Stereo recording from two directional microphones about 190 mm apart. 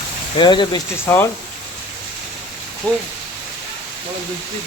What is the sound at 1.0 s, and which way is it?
Speech, 10° left (ahead or behind).